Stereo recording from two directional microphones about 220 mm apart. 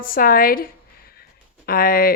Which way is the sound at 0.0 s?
40° left (ahead or behind).